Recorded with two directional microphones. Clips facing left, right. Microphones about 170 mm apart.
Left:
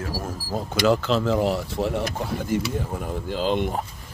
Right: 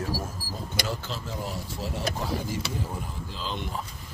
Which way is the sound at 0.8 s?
85° left.